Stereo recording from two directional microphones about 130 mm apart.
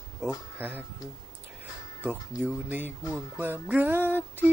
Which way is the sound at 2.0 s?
10° right (ahead or behind).